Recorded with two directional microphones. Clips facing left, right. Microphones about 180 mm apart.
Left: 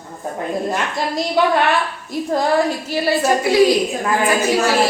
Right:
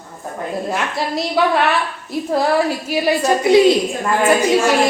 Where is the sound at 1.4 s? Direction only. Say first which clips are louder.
Even; centre (ahead or behind).